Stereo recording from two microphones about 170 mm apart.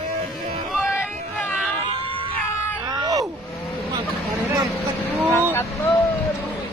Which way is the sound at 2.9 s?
20° right (ahead or behind).